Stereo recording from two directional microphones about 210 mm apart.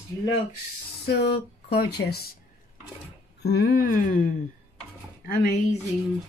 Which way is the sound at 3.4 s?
50° left (ahead or behind).